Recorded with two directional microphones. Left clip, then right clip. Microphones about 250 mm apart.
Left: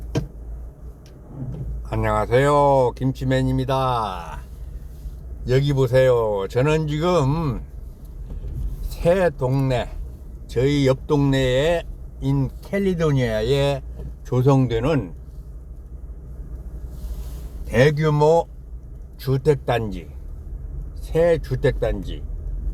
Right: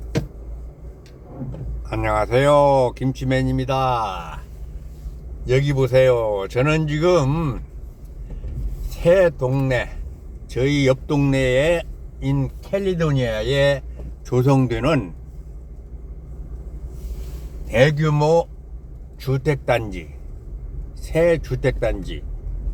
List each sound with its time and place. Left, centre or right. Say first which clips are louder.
1.9 s speech: even; centre
5.5 s speech: right 1 dB; centre
9.0 s speech: right 3 dB; centre
17.7 s speech: even; left
21.1 s speech: right 1 dB; centre